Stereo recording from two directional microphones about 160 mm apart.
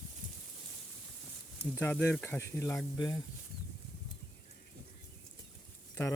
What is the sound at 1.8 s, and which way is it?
Speech, 15° left (ahead or behind).